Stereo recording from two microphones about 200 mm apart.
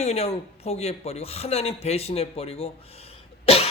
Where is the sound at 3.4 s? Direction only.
30° left (ahead or behind).